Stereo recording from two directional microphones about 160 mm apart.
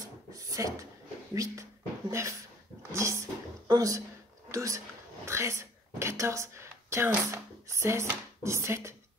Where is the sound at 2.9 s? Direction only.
20° right (ahead or behind).